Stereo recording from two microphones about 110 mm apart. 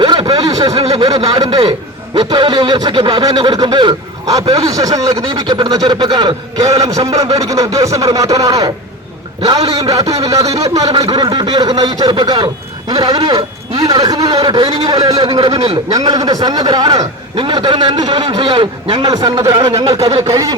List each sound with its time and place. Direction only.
0.0 s a sound: 40° right (ahead or behind)
1.4 s a man's voice: 40° right (ahead or behind)
5.3 s a man's voice: 45° right (ahead or behind)
11.1 s speech: 40° right (ahead or behind)
11.6 s a man's voice: 35° right (ahead or behind)
15.2 s speech: 55° right (ahead or behind)
15.9 s a man's voice: 35° right (ahead or behind)